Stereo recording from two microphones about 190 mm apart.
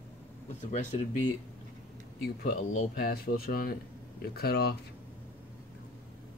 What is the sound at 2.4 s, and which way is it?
Speech, 50° left (ahead or behind).